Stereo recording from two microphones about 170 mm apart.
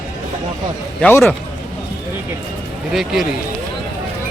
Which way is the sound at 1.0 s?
10° left (ahead or behind).